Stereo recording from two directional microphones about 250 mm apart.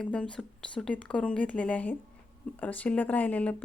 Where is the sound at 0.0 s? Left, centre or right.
Centre.